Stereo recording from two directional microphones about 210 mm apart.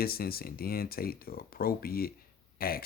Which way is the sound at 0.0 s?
45° left (ahead or behind).